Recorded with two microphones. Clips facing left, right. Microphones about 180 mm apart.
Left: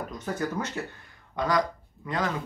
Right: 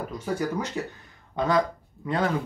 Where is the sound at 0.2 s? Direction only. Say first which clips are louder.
Right 2 dB; 10° right (ahead or behind).